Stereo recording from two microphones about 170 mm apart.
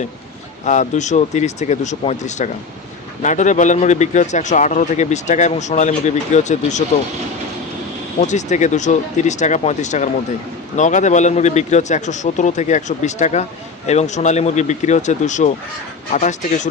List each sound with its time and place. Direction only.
0.6 s speech: 45° left (ahead or behind)
8.2 s speech: 45° left (ahead or behind)